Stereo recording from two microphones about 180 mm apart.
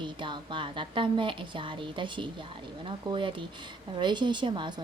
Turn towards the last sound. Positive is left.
turn(degrees=-25)  # may be behind; listen again after turning